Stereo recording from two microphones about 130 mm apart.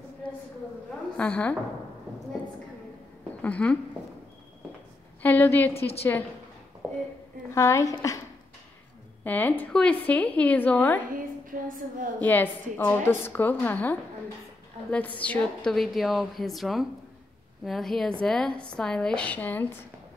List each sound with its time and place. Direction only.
1.1 s a woman's voice: 10° left (ahead or behind)
3.4 s a woman's voice: 10° left (ahead or behind)
5.2 s a woman's voice: 15° left (ahead or behind)
6.8 s a sound: centre (ahead or behind)
7.5 s a woman's voice: 20° left (ahead or behind)
9.2 s a woman's voice: 15° left (ahead or behind)
11.1 s a sound: 90° right
12.2 s a woman's voice: 15° left (ahead or behind)